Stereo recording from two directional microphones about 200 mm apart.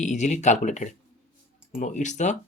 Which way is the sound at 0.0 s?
35° left (ahead or behind).